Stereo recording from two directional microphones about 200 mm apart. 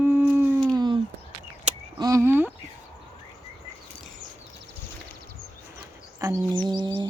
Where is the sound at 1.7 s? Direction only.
30° right (ahead or behind).